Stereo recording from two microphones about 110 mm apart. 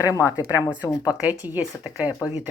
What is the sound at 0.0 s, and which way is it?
Speech, 30° left (ahead or behind).